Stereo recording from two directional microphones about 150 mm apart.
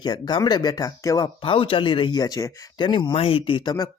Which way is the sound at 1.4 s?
35° left (ahead or behind).